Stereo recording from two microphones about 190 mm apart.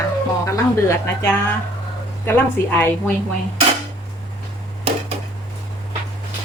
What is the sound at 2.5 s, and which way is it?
Speech, 10° left (ahead or behind).